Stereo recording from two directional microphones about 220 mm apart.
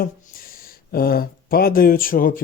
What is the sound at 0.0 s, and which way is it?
Speech, 40° left (ahead or behind).